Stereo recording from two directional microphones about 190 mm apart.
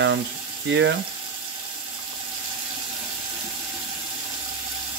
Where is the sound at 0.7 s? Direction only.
70° right (ahead or behind).